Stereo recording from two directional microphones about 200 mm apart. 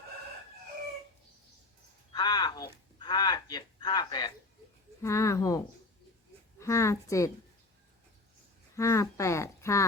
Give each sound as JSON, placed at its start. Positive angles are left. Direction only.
{"t": 2.1, "sound": "a sound", "side_deg": 20}
{"t": 5.0, "sound": "a woman's voice", "side_deg": 15}
{"t": 8.7, "sound": "speech", "side_deg": 15}